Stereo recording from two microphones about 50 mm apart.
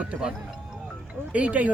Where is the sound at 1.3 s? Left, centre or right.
Right.